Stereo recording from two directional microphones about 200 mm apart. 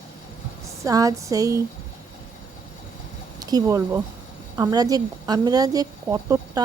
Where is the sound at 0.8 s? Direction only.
15° right (ahead or behind).